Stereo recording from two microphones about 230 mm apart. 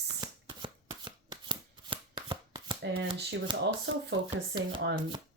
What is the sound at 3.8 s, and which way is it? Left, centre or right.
Speech, right.